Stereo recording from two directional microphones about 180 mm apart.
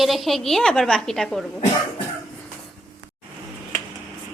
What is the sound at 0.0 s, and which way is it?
A woman's voice, centre (ahead or behind).